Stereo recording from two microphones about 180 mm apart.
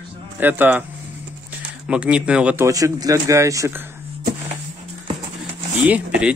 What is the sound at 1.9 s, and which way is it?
Speech, 5° right (ahead or behind).